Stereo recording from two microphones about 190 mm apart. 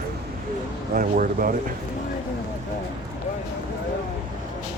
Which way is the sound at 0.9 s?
45° right (ahead or behind).